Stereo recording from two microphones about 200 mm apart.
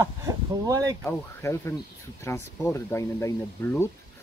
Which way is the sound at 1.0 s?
15° left (ahead or behind).